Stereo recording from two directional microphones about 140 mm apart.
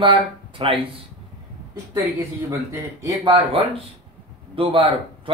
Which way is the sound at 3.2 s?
40° right (ahead or behind).